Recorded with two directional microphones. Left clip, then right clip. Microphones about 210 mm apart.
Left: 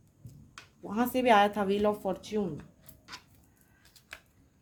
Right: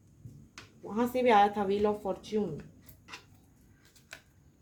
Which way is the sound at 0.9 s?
55° left (ahead or behind).